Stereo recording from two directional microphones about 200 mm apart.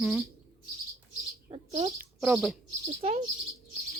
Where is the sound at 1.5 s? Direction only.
30° right (ahead or behind).